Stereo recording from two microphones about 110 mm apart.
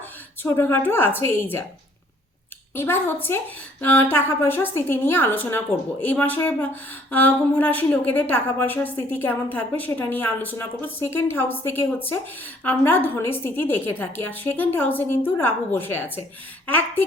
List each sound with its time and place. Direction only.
0.4 s speech: 20° left (ahead or behind)
2.7 s a woman's voice: 20° left (ahead or behind)